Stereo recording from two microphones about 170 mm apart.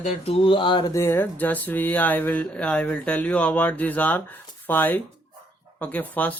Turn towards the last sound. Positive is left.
turn(degrees=10)  # may be behind; listen again after turning